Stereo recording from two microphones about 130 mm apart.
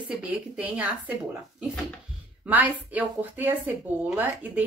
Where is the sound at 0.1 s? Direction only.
10° right (ahead or behind).